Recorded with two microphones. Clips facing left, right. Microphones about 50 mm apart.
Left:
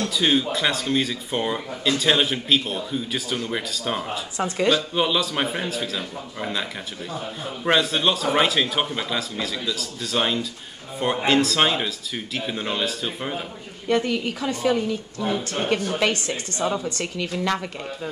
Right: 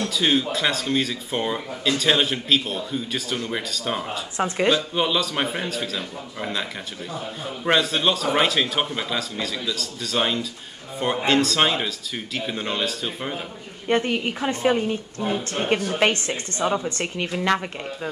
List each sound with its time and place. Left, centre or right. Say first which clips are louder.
0.0 s speech: even; centre
4.4 s a woman's voice: right 2 dB; right
4.9 s speech: even; centre
13.8 s a woman's voice: even; right
15.6 s a woman's voice: right 2 dB; right